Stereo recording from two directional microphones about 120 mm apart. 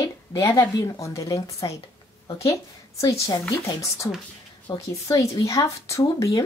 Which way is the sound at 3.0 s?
25° left (ahead or behind).